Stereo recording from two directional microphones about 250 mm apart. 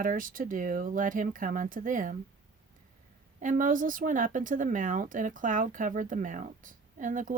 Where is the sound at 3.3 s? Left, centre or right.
Right.